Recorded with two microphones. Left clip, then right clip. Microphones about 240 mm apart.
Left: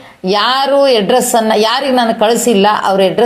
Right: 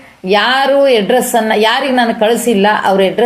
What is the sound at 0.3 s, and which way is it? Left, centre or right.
A woman's voice, left.